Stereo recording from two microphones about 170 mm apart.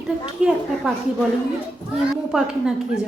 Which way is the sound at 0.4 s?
5° right (ahead or behind).